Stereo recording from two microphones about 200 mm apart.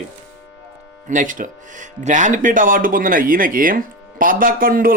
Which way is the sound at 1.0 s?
40° right (ahead or behind).